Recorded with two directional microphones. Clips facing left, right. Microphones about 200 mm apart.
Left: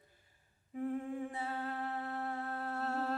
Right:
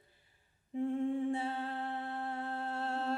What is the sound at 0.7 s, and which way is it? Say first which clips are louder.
Humming: right 5 dB; 25° right (ahead or behind).